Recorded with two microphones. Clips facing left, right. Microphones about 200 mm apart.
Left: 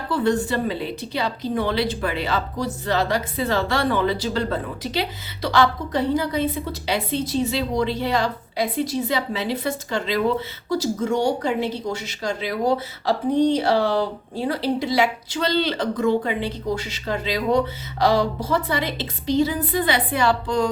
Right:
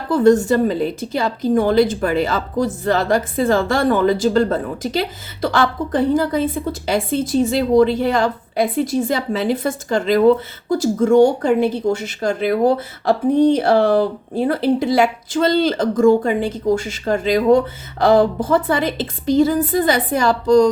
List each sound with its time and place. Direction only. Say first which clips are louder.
0.1 s speech: right 8 dB; 45° right (ahead or behind)